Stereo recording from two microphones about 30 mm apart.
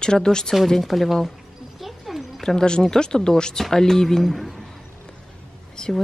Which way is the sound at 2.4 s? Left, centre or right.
Left.